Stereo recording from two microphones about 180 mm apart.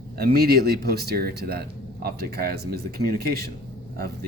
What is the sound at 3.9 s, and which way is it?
Speech, 55° right (ahead or behind).